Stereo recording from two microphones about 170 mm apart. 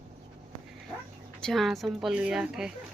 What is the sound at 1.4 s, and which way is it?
Speech, centre (ahead or behind).